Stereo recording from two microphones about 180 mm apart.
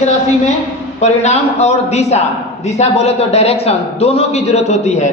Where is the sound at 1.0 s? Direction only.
40° left (ahead or behind).